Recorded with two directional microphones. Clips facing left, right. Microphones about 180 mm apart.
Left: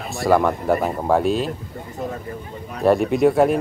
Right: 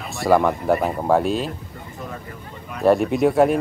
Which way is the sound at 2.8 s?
Centre (ahead or behind).